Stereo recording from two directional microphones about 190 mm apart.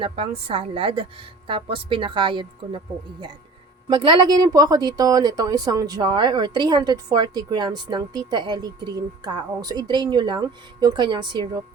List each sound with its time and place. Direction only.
0.0 s speech: 30° right (ahead or behind)